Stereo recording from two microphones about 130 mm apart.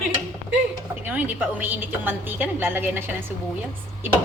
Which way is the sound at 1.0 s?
10° right (ahead or behind).